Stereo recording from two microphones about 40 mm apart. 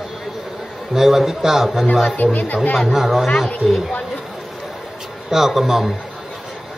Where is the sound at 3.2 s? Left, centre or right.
Left.